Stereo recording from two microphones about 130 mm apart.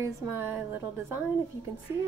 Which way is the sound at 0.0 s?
20° right (ahead or behind).